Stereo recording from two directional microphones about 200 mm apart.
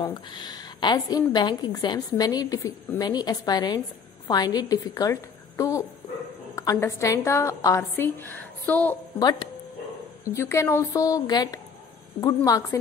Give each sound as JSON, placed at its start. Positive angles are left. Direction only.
{"t": 0.0, "sound": "a woman's voice", "side_deg": 20}
{"t": 9.2, "sound": "a woman's voice", "side_deg": 20}